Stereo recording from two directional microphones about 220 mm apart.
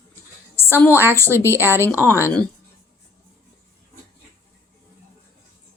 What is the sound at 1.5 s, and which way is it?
Speech, 10° right (ahead or behind).